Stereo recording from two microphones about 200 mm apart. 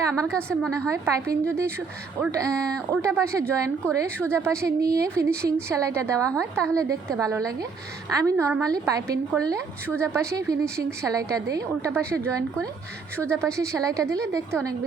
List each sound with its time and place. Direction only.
0.7 s a woman's voice: 15° right (ahead or behind)